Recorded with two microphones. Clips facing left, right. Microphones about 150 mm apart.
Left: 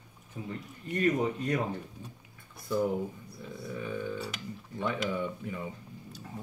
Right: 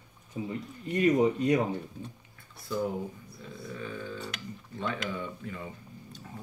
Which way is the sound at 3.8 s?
15° left (ahead or behind).